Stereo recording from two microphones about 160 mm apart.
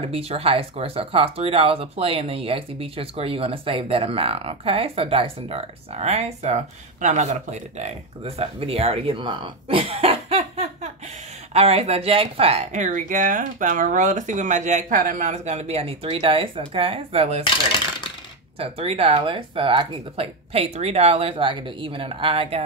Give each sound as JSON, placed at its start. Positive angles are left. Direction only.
{"t": 0.1, "sound": "speech", "side_deg": -40}
{"t": 18.6, "sound": "speech", "side_deg": -40}